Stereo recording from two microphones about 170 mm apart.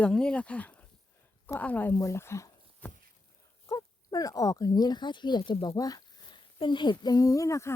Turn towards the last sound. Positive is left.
turn(degrees=20)  # may be behind; listen again after turning